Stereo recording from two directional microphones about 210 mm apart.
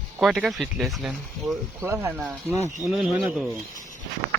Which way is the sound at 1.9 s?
10° right (ahead or behind).